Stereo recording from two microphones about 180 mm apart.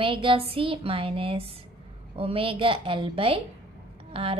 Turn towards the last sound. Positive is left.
turn(degrees=-30)  # may be behind; listen again after turning